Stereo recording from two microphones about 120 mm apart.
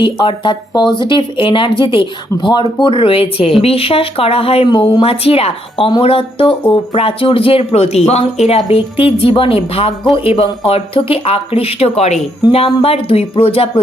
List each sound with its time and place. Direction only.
0.0 s speech: 40° left (ahead or behind); by 12.2 s 65° left (ahead or behind)
12.5 s speech: 50° left (ahead or behind)